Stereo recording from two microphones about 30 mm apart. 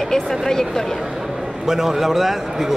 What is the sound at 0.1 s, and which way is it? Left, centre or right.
Speech, centre.